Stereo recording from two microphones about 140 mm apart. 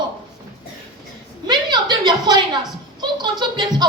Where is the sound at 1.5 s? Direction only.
30° right (ahead or behind).